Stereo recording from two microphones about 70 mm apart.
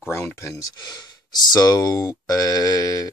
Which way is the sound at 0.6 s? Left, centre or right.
Left.